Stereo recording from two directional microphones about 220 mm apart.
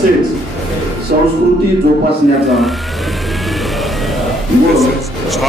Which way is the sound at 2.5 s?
Centre (ahead or behind).